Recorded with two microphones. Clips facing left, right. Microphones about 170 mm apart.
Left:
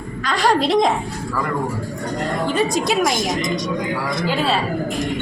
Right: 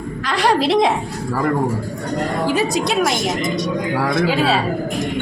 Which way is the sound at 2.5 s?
Centre (ahead or behind).